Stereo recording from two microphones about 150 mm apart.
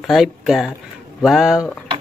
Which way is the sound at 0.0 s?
Centre (ahead or behind).